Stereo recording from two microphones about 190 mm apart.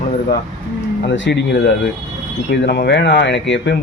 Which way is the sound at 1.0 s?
70° left (ahead or behind).